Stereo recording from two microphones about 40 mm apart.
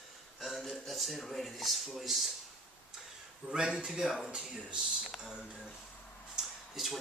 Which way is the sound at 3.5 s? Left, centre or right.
Centre.